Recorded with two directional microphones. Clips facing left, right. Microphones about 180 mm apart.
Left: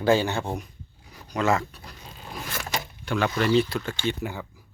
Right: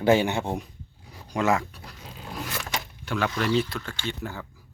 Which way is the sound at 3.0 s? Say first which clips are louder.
Left 2 dB; centre (ahead or behind).